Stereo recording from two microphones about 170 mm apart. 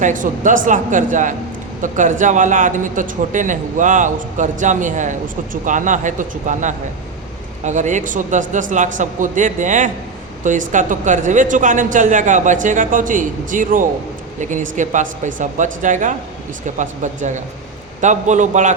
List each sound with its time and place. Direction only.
0.0 s speech: 50° right (ahead or behind)